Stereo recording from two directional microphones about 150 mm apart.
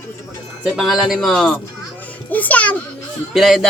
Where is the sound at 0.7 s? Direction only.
Centre (ahead or behind).